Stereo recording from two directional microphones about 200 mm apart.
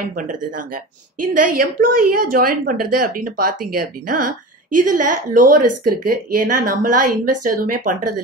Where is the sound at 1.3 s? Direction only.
45° right (ahead or behind).